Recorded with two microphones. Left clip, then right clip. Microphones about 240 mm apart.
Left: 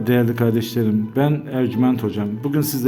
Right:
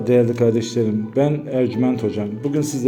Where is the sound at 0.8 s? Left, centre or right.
Left.